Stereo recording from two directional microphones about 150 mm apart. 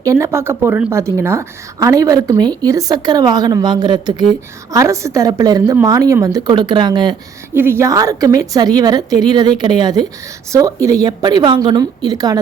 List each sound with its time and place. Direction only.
0.0 s a woman's voice: 20° right (ahead or behind)
7.5 s a woman's voice: 15° right (ahead or behind)